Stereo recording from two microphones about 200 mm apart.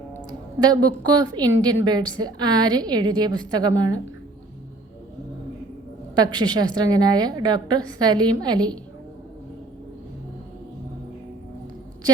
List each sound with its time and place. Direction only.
0.3 s a woman's voice: 20° right (ahead or behind)
6.1 s a woman's voice: 20° right (ahead or behind)